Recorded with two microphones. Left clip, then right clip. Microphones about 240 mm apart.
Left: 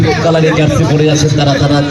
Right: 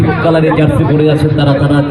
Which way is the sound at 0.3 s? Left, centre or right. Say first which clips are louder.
Right 2 dB; right.